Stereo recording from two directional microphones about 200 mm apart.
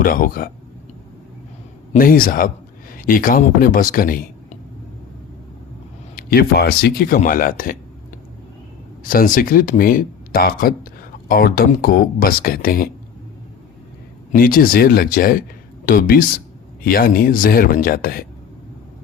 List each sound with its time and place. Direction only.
0.0 s speech: 45° left (ahead or behind)
1.9 s speech: 45° left (ahead or behind)
6.1 s speech: 50° left (ahead or behind)
9.0 s speech: 45° left (ahead or behind)
14.3 s speech: 45° left (ahead or behind)